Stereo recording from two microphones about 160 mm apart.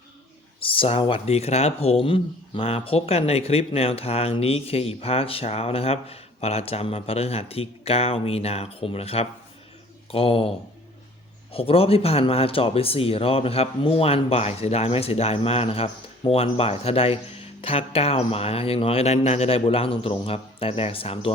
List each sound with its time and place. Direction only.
0.6 s speech: 35° left (ahead or behind)
11.5 s speech: 35° left (ahead or behind)